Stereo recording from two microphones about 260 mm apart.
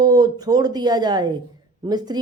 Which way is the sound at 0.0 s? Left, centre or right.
Centre.